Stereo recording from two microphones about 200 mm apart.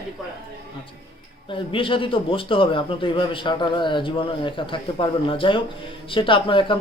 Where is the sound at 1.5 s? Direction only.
25° left (ahead or behind).